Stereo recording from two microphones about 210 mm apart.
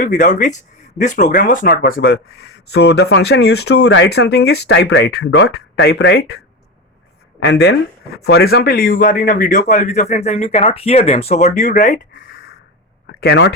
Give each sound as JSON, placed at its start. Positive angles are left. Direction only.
{"t": 0.0, "sound": "speech", "side_deg": 35}
{"t": 13.1, "sound": "speech", "side_deg": 50}